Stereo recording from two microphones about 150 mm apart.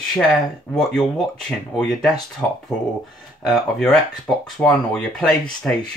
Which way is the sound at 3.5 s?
Centre (ahead or behind).